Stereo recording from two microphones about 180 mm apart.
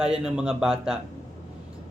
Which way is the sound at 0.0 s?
5° right (ahead or behind).